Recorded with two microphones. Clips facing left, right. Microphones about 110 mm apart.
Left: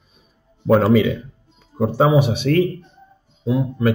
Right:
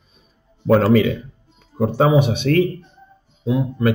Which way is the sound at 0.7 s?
10° left (ahead or behind).